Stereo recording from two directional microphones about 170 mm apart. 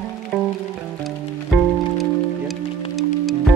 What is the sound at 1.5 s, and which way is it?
Music, centre (ahead or behind).